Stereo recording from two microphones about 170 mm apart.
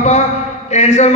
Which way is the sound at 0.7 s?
40° left (ahead or behind).